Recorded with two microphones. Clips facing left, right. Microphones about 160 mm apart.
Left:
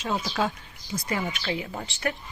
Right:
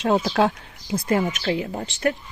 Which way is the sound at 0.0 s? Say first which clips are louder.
Right 8 dB; 65° right (ahead or behind).